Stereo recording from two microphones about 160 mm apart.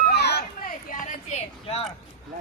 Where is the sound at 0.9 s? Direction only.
55° left (ahead or behind).